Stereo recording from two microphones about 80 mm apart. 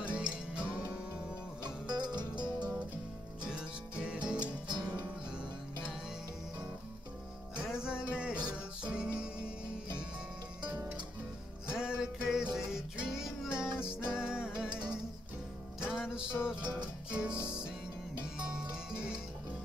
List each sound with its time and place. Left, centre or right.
0.0 s music: centre
1.6 s music: right
3.4 s music: centre
4.4 s music: right
7.6 s music: centre
11.7 s music: centre